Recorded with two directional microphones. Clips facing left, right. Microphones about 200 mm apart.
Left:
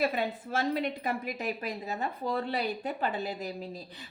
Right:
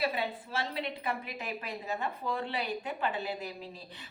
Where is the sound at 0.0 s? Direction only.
45° left (ahead or behind).